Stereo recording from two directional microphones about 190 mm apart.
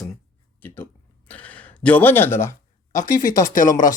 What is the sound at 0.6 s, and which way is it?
Speech, 10° left (ahead or behind).